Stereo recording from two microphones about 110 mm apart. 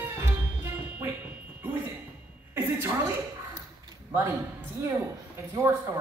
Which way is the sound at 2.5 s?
20° right (ahead or behind).